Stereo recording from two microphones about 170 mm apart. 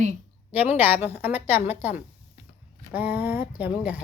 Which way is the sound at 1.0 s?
10° right (ahead or behind).